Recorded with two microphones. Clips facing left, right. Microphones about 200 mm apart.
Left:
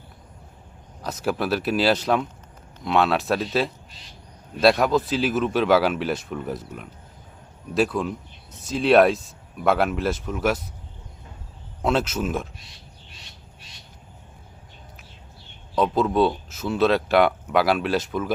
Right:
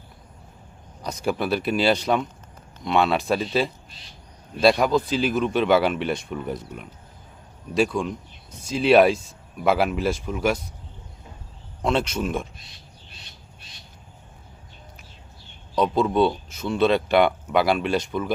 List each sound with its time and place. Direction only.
1.0 s speech: centre (ahead or behind)
11.8 s speech: 5° left (ahead or behind)
15.7 s speech: centre (ahead or behind)